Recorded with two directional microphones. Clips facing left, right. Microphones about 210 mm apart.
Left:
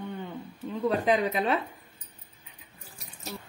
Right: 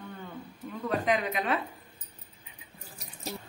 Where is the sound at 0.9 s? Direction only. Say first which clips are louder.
Left 3 dB; 35° left (ahead or behind).